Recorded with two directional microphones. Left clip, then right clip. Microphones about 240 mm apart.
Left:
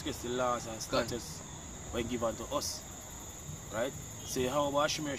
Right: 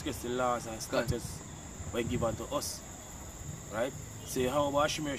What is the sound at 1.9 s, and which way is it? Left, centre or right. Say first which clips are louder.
Speech: right 1 dB; centre.